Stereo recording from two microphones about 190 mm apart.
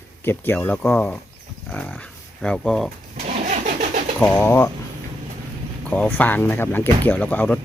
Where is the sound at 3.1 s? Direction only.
40° right (ahead or behind).